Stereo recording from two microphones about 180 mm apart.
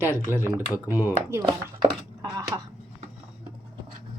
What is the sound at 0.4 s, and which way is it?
Speech, 10° right (ahead or behind).